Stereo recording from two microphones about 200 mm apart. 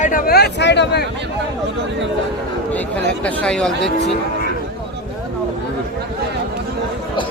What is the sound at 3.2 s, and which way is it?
Speech, 5° left (ahead or behind).